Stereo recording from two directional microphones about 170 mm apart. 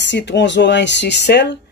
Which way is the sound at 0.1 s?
90° left.